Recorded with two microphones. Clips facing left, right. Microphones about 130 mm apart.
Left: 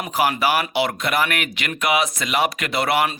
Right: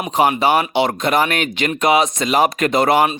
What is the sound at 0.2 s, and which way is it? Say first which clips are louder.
Speech: right 5 dB; 25° right (ahead or behind).